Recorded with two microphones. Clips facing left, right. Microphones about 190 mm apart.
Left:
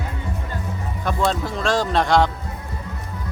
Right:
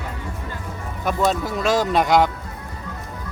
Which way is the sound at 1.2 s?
5° right (ahead or behind).